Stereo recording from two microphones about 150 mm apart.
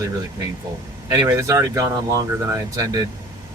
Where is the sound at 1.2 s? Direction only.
25° right (ahead or behind).